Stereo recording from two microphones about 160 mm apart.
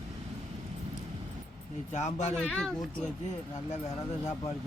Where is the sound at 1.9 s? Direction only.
50° left (ahead or behind).